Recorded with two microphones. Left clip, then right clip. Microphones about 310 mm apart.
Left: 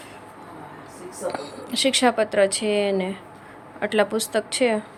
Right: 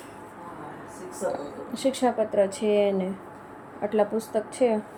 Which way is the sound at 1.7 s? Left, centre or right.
Left.